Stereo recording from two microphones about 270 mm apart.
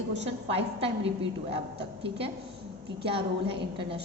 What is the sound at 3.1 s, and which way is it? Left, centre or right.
Speech, centre.